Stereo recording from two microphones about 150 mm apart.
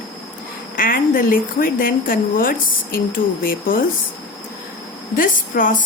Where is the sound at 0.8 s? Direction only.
70° left (ahead or behind).